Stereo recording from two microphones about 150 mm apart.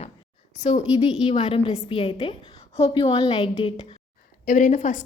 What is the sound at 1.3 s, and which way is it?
A woman's voice, 35° left (ahead or behind).